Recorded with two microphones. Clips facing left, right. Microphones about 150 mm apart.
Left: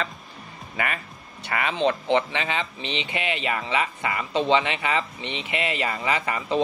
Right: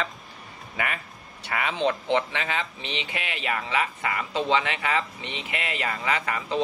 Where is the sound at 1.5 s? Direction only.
5° right (ahead or behind).